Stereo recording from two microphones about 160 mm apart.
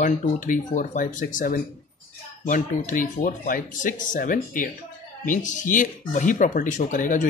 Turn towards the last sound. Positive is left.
turn(degrees=55)  # may be behind; listen again after turning